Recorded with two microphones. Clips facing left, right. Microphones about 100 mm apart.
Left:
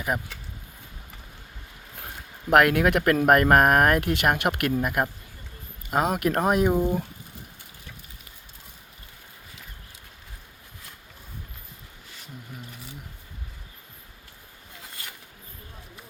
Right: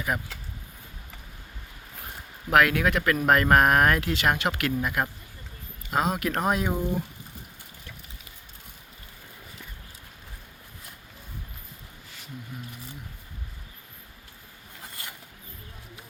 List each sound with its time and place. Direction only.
2.5 s speech: 55° left (ahead or behind)